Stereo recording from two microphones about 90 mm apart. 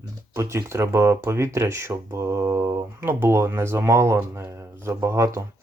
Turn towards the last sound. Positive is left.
turn(degrees=-30)  # may be behind; listen again after turning